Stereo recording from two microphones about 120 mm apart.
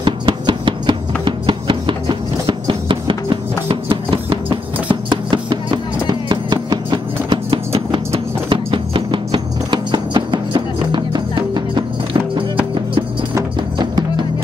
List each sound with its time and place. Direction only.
0.0 s music: 40° right (ahead or behind)